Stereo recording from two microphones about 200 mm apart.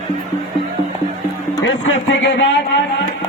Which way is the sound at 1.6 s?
65° left (ahead or behind).